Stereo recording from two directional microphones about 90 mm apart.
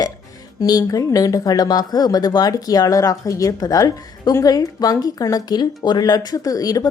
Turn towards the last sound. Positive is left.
turn(degrees=40)  # may be behind; listen again after turning